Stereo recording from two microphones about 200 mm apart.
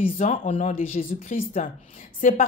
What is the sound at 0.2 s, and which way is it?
A woman's voice, 35° left (ahead or behind).